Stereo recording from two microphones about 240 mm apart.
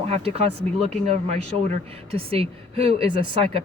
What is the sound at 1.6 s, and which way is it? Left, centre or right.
Speech, right.